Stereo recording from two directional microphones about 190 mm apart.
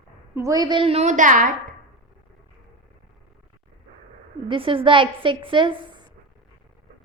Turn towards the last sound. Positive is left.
turn(degrees=-25)  # may be behind; listen again after turning